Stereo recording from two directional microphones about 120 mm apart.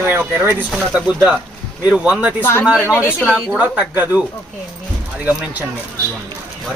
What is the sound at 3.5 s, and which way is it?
Speech, 10° right (ahead or behind).